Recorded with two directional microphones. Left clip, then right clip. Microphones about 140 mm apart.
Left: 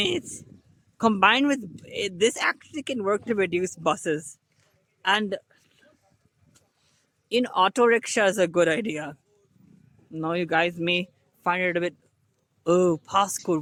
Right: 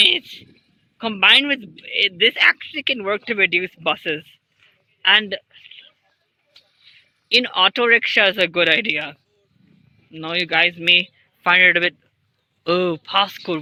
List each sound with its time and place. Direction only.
0.0 s a man's voice: 50° left (ahead or behind)
0.9 s a man's voice: 75° left (ahead or behind); by 4.3 s 40° left (ahead or behind)
5.3 s a sound: 50° left (ahead or behind)
7.3 s speech: 30° left (ahead or behind)
10.1 s a man's voice: 45° left (ahead or behind)
11.4 s speech: 15° left (ahead or behind)
13.2 s speech: 15° left (ahead or behind)